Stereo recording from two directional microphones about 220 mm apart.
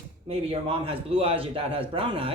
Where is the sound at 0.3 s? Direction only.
25° right (ahead or behind).